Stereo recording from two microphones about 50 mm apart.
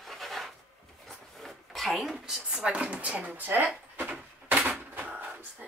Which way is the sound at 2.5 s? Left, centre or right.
Centre.